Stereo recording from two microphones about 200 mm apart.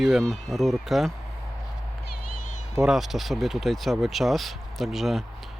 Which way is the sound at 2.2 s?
40° left (ahead or behind).